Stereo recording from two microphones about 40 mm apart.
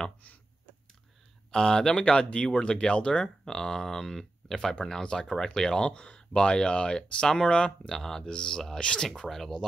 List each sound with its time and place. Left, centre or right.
1.5 s speech: centre
7.0 s speech: centre
7.9 s speech: centre